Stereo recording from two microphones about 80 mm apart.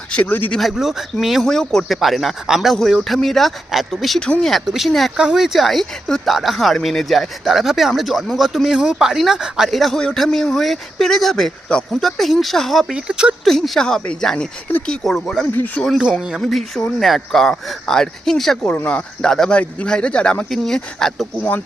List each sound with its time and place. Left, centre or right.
0.3 s speech: left
0.6 s speech: centre
4.5 s speech: centre
12.9 s speech: centre
13.4 s speech: centre
15.5 s speech: left
16.4 s speech: centre